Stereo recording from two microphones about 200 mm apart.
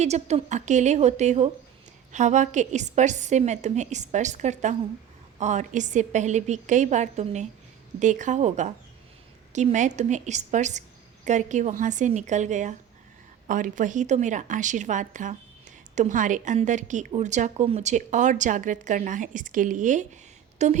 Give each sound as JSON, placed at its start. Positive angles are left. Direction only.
{"t": 0.0, "sound": "a woman's voice", "side_deg": -35}